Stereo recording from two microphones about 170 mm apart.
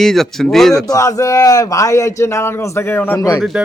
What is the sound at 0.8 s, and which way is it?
A man's voice, 20° left (ahead or behind).